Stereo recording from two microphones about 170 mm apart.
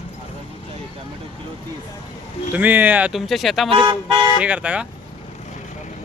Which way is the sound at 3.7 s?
30° right (ahead or behind).